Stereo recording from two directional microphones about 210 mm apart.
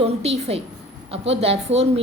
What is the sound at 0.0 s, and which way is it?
A woman's voice, 30° right (ahead or behind).